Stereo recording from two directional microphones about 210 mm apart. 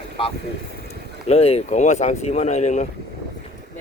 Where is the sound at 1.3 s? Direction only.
30° left (ahead or behind).